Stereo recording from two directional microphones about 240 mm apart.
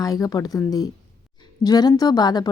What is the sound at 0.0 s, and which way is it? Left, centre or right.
A woman's voice, centre.